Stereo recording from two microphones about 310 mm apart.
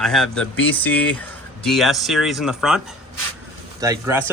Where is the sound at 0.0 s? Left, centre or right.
Centre.